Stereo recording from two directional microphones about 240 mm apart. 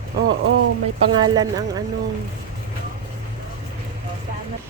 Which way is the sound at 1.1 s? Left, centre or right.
Centre.